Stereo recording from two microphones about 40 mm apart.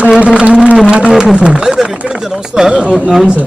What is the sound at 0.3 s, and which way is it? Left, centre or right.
Speech, right.